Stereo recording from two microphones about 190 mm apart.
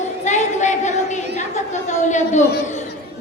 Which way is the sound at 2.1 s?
40° left (ahead or behind).